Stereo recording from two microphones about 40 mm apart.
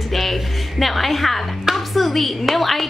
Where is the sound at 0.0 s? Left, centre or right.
Centre.